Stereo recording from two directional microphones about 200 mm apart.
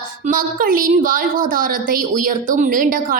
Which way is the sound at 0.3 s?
45° right (ahead or behind).